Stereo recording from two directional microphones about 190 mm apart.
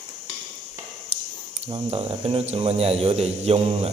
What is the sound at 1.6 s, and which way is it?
Speech, 30° right (ahead or behind).